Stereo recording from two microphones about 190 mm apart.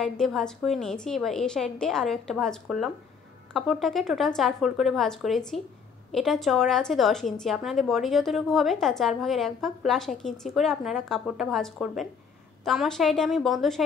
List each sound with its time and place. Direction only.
0.0 s a woman's voice: centre (ahead or behind)